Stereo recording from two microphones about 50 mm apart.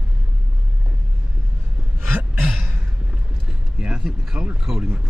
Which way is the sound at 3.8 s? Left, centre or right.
Centre.